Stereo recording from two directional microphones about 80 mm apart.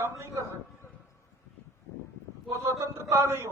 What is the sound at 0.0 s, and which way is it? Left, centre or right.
Speech, right.